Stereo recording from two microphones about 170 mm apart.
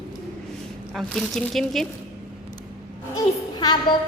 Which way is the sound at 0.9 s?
5° left (ahead or behind).